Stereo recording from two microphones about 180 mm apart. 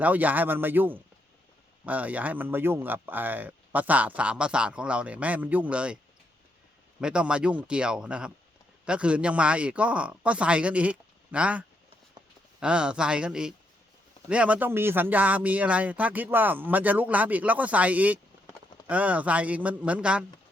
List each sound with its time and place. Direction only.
0.0 s speech: 10° right (ahead or behind)
7.0 s speech: 5° right (ahead or behind)